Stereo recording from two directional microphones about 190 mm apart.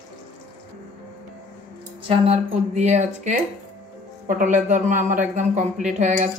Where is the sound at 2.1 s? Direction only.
35° right (ahead or behind).